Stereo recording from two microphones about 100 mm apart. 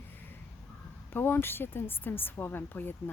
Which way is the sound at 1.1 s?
20° left (ahead or behind).